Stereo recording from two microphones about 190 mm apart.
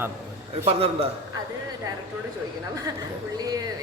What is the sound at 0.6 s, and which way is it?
Speech, 30° right (ahead or behind).